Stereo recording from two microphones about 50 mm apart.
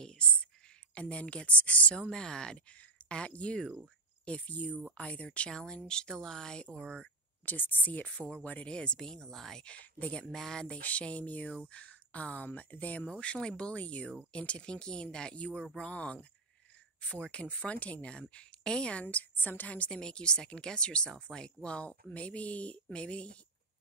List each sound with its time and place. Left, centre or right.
0.0 s a sound: centre
0.9 s speech: left
2.0 s speech: centre
5.5 s speech: centre
7.4 s speech: left; by 9.7 s centre
9.7 s speech: left
10.3 s speech: centre
10.8 s speech: left
13.2 s speech: centre
19.3 s speech: left
19.7 s speech: left
20.0 s speech: centre